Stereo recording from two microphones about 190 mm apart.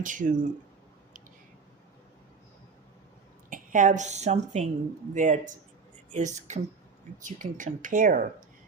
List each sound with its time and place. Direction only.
0.0 s speech: 45° right (ahead or behind)
3.5 s a woman's voice: 45° right (ahead or behind)